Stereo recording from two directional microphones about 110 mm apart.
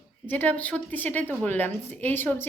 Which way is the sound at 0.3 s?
15° left (ahead or behind).